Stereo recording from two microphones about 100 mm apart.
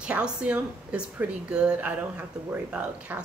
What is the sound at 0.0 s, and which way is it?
Speech, 10° right (ahead or behind).